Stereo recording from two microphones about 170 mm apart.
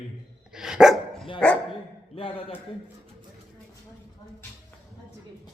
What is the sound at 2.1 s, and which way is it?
Speech, 30° left (ahead or behind).